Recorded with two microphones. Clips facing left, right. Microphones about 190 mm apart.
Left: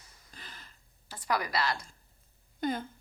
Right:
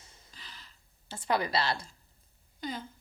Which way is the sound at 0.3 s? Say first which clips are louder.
Left 3 dB; 50° left (ahead or behind).